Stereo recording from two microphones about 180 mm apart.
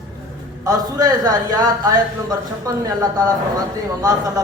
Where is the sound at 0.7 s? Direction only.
20° right (ahead or behind).